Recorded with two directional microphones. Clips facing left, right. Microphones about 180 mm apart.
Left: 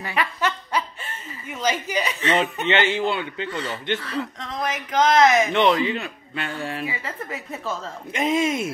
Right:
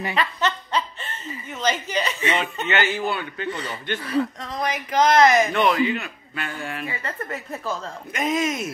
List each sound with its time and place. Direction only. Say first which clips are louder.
0.1 s snicker: left 2 dB; 10° left (ahead or behind)
1.6 s speech: even; 10° left (ahead or behind)
2.3 s speech: left 5 dB; 25° left (ahead or behind)
4.0 s speech: right 5 dB; 15° right (ahead or behind)
4.4 s speech: right 1 dB; centre (ahead or behind)
5.7 s speech: even; 30° left (ahead or behind)
6.8 s speech: even; 5° left (ahead or behind)
8.1 s speech: left 2 dB; 25° left (ahead or behind)